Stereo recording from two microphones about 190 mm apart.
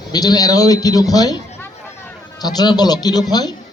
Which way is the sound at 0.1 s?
20° left (ahead or behind).